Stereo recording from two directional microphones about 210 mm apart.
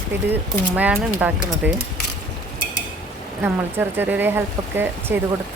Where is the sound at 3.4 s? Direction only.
10° right (ahead or behind).